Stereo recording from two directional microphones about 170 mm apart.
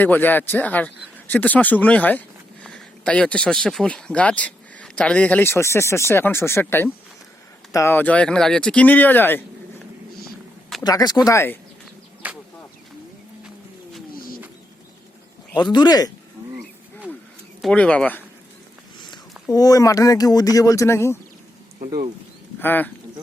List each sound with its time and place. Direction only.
0.0 s speech: 10° left (ahead or behind)
10.8 s speech: 25° left (ahead or behind)
12.2 s a sound: 10° right (ahead or behind)
15.7 s speech: 25° left (ahead or behind)
17.6 s speech: 5° left (ahead or behind)
18.9 s speech: 25° left (ahead or behind)
22.6 s speech: 10° left (ahead or behind)